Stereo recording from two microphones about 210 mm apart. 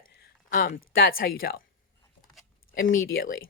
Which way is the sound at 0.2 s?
40° left (ahead or behind).